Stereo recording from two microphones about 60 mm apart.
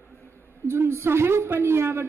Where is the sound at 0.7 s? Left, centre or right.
Right.